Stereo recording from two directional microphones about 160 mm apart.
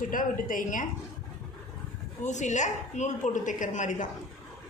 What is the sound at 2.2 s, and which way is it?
A woman's voice, 50° left (ahead or behind).